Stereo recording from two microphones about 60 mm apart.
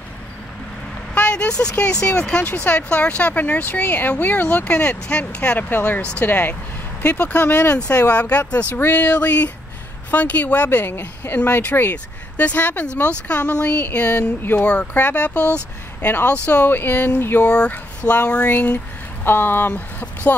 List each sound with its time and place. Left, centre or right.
1.1 s vehicle: centre
1.6 s speech: centre; by 17.5 s left
17.5 s speech: left
19.2 s speech: left